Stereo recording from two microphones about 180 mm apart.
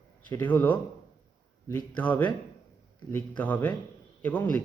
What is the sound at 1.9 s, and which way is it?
Speech, 10° left (ahead or behind).